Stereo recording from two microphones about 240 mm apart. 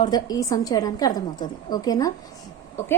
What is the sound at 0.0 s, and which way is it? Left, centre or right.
A woman's voice, centre.